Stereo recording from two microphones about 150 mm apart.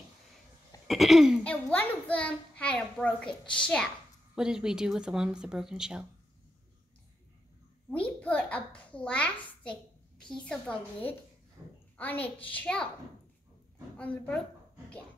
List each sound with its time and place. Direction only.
0.8 s speech: centre (ahead or behind)
1.4 s a child's voice: 10° left (ahead or behind)
4.4 s speech: 5° right (ahead or behind)
8.2 s a child's voice: 10° left (ahead or behind)
11.6 s a sound: 15° right (ahead or behind)
12.0 s a child's voice: 10° left (ahead or behind)
13.9 s a child's voice: 10° left (ahead or behind)